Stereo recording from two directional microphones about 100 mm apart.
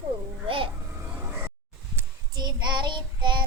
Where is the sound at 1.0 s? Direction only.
25° right (ahead or behind).